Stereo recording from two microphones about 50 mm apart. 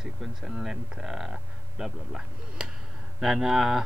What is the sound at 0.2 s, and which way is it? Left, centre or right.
Speech, centre.